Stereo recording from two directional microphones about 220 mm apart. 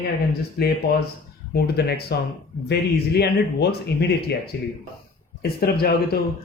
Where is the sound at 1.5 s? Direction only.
45° left (ahead or behind).